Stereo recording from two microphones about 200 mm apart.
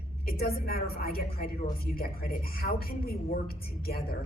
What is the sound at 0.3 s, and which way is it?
A woman's voice, 50° left (ahead or behind).